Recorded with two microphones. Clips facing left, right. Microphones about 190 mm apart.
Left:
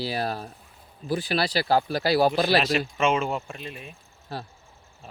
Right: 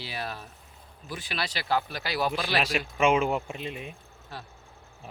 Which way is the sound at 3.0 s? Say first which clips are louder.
Right 4 dB; 15° right (ahead or behind).